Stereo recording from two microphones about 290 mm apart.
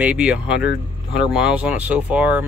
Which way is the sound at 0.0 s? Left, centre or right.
Centre.